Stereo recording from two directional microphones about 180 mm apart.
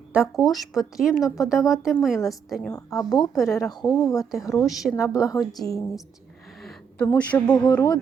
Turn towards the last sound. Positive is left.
turn(degrees=20)  # may be behind; listen again after turning